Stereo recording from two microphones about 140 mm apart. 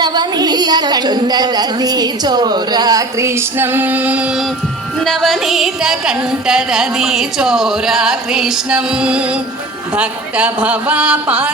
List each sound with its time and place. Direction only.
0.0 s a woman's voice: 30° right (ahead or behind); by 4.4 s 10° right (ahead or behind)
5.0 s music: centre (ahead or behind)
9.9 s speech: 10° right (ahead or behind)